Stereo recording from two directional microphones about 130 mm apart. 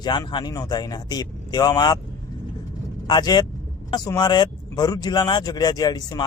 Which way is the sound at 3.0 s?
30° left (ahead or behind).